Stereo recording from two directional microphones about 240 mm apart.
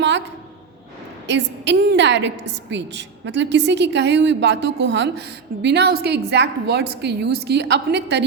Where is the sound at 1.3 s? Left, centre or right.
Right.